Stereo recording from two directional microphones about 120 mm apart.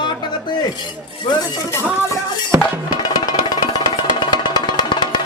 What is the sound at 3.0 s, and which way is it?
Music, 35° left (ahead or behind).